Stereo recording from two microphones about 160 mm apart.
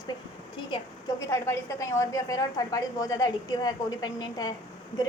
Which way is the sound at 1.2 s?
20° left (ahead or behind).